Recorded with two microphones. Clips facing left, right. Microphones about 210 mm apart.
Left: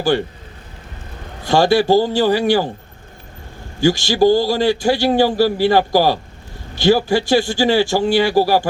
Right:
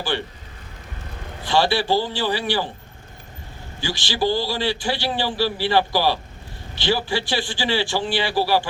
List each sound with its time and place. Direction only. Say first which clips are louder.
0.1 s a man's voice: left 8 dB; 45° left (ahead or behind)
1.5 s a man's voice: left 7 dB; 45° left (ahead or behind)
3.8 s a man's voice: left 11 dB; 45° left (ahead or behind)